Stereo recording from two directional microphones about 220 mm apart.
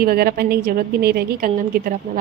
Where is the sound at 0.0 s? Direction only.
45° right (ahead or behind).